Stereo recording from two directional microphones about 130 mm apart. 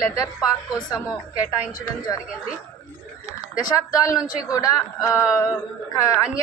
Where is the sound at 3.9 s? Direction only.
25° left (ahead or behind).